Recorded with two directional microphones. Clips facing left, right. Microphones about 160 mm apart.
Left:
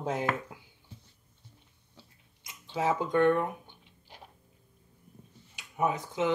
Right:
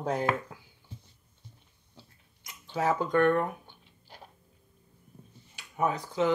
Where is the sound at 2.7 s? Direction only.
20° left (ahead or behind).